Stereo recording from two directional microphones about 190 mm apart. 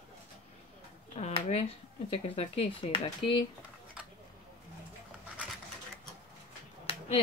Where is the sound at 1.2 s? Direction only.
35° left (ahead or behind).